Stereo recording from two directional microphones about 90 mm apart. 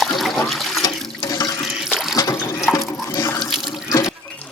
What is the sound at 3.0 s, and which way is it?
Water, 30° left (ahead or behind).